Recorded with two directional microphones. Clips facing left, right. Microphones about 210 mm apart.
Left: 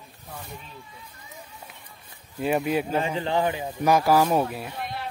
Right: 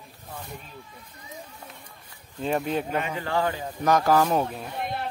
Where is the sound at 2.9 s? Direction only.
25° left (ahead or behind); by 4.7 s 10° left (ahead or behind).